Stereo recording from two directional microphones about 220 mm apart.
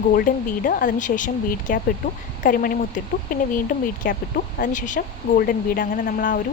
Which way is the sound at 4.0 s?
40° left (ahead or behind).